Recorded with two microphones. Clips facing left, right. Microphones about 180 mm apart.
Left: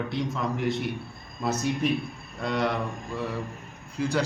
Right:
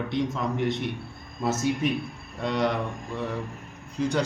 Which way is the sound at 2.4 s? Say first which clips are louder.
Right 1 dB; centre (ahead or behind).